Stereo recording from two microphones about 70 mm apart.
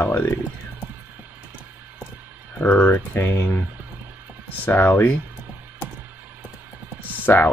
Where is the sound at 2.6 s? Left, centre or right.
Left.